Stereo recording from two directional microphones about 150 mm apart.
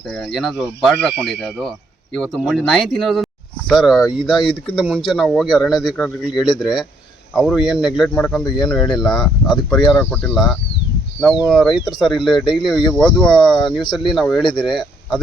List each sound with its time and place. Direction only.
0.1 s speech: centre (ahead or behind)
4.6 s speech: 35° left (ahead or behind)
4.9 s speech: centre (ahead or behind)
10.0 s speech: 10° left (ahead or behind)
10.3 s speech: centre (ahead or behind)